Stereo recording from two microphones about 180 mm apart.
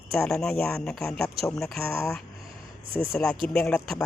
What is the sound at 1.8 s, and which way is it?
Speech, 15° left (ahead or behind).